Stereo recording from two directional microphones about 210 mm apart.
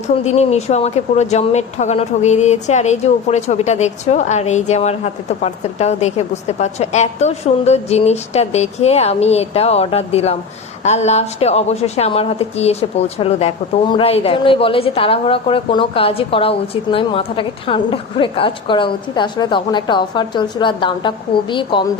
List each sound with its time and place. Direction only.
0.3 s a woman's voice: 30° left (ahead or behind)